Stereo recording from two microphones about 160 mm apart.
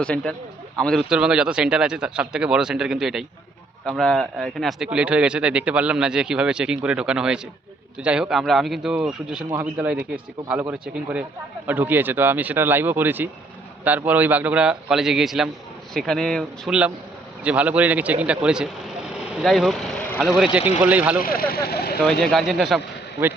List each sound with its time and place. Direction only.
0.0 s speech: 5° left (ahead or behind)
17.4 s speech: 10° right (ahead or behind)
21.2 s speech: 65° left (ahead or behind)
22.2 s speech: centre (ahead or behind)